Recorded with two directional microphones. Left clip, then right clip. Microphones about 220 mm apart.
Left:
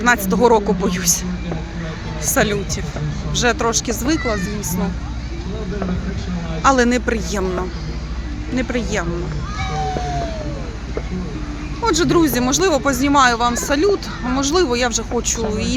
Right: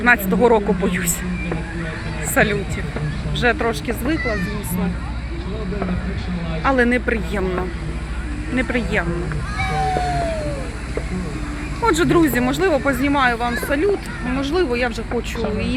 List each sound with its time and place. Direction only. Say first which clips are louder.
0.0 s speech: even; 10° left (ahead or behind)
2.3 s speech: even; 10° left (ahead or behind)
6.6 s speech: left 3 dB; 15° left (ahead or behind)
8.5 s speech: right 1 dB; 5° left (ahead or behind)
11.8 s speech: even; 5° left (ahead or behind)